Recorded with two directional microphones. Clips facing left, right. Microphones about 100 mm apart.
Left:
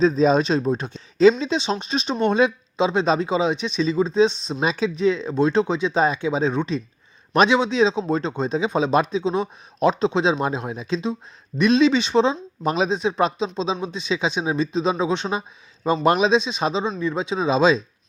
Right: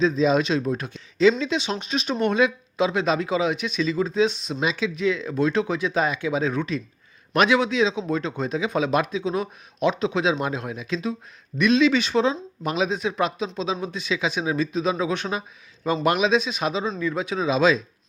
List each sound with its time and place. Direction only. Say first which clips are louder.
0.0 s speech: left 3 dB; 40° left (ahead or behind)